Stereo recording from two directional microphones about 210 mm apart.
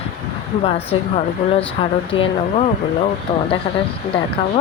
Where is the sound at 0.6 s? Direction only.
30° left (ahead or behind).